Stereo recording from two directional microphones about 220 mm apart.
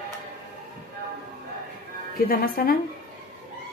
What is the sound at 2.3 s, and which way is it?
Speech, 40° left (ahead or behind).